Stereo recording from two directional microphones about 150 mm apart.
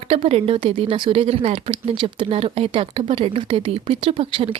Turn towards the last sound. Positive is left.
turn(degrees=-40)  # may be behind; listen again after turning